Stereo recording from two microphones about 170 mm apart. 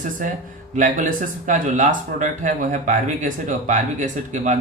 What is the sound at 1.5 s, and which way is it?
Speech, 50° right (ahead or behind).